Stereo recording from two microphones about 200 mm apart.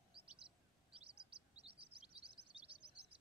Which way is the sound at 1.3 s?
30° right (ahead or behind).